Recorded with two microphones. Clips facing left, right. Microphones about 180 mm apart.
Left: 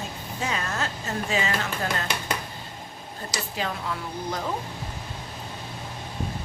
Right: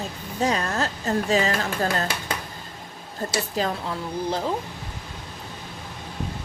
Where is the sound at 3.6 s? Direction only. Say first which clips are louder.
Right 5 dB; 40° right (ahead or behind).